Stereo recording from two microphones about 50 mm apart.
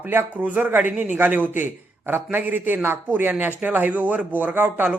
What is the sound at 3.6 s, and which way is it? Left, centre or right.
A man's voice, right.